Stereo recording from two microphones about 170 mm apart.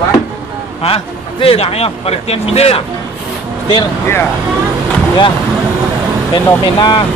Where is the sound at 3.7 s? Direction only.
15° left (ahead or behind).